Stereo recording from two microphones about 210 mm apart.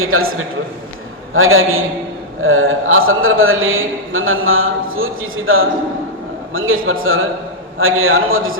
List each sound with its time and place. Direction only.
0.0 s a man's voice: 80° right
1.3 s a man's voice: 75° right (ahead or behind)